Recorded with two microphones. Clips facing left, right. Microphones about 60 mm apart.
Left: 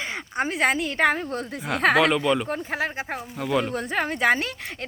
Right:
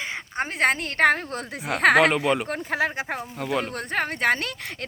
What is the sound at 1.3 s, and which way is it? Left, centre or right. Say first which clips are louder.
Speech: left 1 dB; centre.